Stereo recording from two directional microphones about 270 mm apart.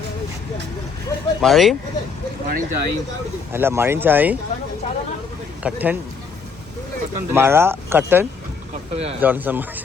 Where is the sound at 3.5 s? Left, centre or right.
Centre.